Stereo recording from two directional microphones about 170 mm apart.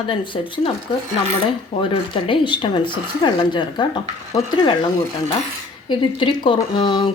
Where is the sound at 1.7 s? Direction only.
30° left (ahead or behind).